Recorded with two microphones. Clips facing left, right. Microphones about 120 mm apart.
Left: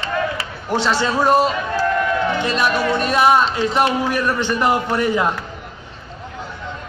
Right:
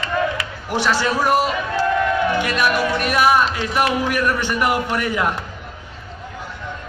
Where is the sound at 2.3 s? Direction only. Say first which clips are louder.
Even; 25° left (ahead or behind).